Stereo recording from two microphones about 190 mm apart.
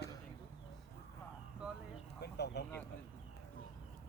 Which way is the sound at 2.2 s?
60° left (ahead or behind).